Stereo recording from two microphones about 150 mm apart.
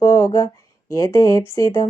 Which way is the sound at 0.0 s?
20° left (ahead or behind).